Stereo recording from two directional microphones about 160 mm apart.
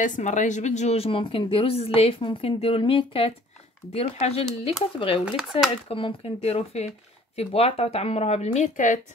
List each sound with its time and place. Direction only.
0.0 s speech: 50° left (ahead or behind)
5.2 s speech: 5° right (ahead or behind)
5.9 s speech: 35° left (ahead or behind); by 9.0 s 50° left (ahead or behind)